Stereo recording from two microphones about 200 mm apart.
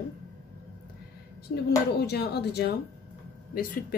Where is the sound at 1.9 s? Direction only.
55° left (ahead or behind).